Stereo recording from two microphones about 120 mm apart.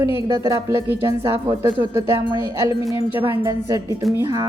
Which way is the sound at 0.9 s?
25° right (ahead or behind).